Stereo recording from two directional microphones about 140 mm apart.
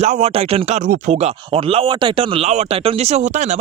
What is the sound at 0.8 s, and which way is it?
Speech, 65° right (ahead or behind).